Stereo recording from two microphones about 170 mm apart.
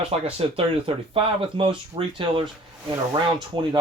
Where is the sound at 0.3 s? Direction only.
35° right (ahead or behind).